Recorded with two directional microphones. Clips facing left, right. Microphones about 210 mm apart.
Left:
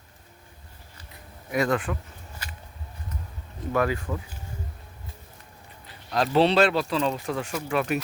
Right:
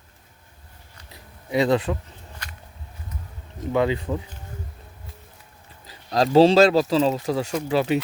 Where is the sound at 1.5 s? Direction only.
30° right (ahead or behind).